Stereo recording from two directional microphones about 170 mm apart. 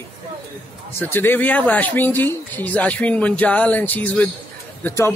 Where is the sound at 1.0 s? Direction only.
10° left (ahead or behind).